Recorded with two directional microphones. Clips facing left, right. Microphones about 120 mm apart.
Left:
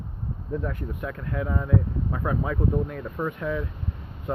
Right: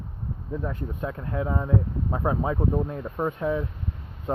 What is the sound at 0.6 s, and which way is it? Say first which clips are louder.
Speech: right 1 dB; 25° right (ahead or behind).